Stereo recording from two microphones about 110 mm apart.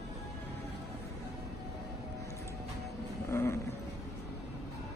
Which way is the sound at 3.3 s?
25° left (ahead or behind).